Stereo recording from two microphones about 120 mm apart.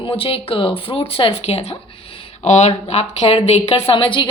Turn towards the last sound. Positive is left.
turn(degrees=40)  # may be behind; listen again after turning